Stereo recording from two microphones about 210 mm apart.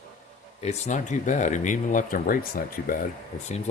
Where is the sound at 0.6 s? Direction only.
35° left (ahead or behind).